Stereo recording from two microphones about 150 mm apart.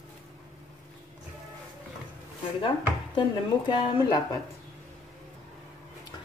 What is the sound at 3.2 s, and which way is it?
Speech, 30° left (ahead or behind).